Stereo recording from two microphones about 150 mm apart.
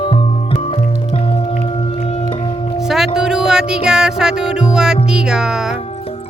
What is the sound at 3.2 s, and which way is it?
Music, 5° right (ahead or behind).